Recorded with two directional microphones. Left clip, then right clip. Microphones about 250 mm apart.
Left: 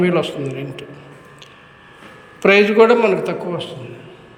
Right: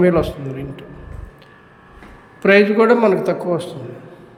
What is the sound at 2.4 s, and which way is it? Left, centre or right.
A man's voice, centre.